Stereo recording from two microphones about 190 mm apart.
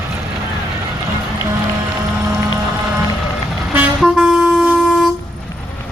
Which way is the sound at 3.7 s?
5° right (ahead or behind).